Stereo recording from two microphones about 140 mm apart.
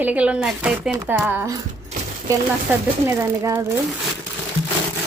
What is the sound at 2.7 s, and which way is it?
Speech, 15° right (ahead or behind).